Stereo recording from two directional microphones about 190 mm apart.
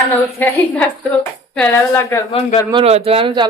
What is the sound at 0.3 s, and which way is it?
Speech, 10° left (ahead or behind).